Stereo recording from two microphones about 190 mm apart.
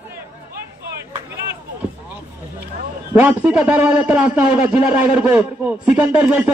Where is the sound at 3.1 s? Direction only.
5° right (ahead or behind).